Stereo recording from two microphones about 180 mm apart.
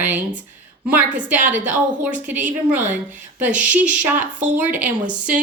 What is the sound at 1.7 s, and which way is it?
A woman's voice, 10° right (ahead or behind).